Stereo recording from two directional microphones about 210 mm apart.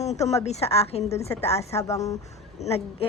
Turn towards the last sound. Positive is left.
turn(degrees=30)  # may be behind; listen again after turning